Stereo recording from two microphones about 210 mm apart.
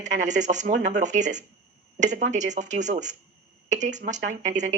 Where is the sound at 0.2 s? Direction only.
35° right (ahead or behind).